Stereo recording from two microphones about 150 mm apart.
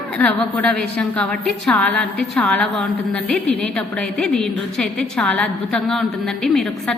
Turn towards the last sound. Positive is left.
turn(degrees=0)  # may be behind; listen again after turning